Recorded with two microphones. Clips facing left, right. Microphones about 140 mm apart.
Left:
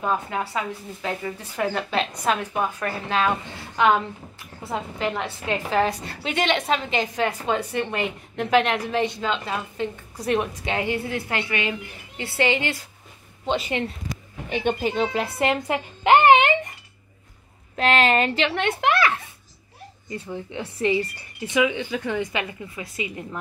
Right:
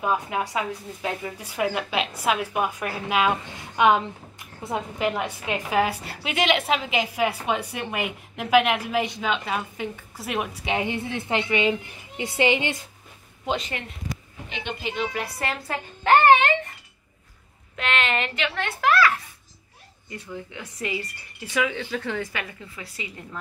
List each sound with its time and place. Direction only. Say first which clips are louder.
0.0 s speech: even; 10° right (ahead or behind)
14.5 s speech: left 8 dB; 45° left (ahead or behind)
15.1 s speech: left 7 dB; 25° left (ahead or behind)
17.7 s a woman's voice: left 6 dB; 35° left (ahead or behind); by 23.2 s 20° left (ahead or behind)